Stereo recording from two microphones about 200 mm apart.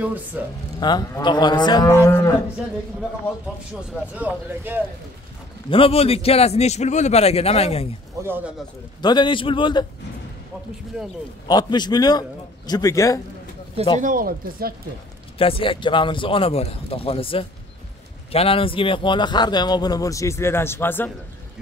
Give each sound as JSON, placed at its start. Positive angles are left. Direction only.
{"t": 0.0, "sound": "speech", "side_deg": -5}
{"t": 0.7, "sound": "speech", "side_deg": 20}
{"t": 4.1, "sound": "speech", "side_deg": -10}
{"t": 5.7, "sound": "a man's voice", "side_deg": 30}
{"t": 8.2, "sound": "speech", "side_deg": -10}
{"t": 9.0, "sound": "speech", "side_deg": 25}
{"t": 10.9, "sound": "speech", "side_deg": -5}
{"t": 11.4, "sound": "speech", "side_deg": 20}
{"t": 14.0, "sound": "speech", "side_deg": -45}
{"t": 15.3, "sound": "speech", "side_deg": 25}